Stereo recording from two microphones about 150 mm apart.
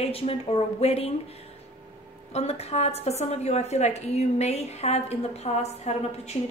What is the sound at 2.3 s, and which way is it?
A woman's voice, 45° left (ahead or behind).